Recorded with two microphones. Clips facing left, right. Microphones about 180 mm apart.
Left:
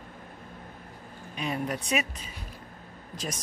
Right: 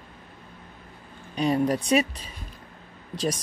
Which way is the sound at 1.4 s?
35° right (ahead or behind).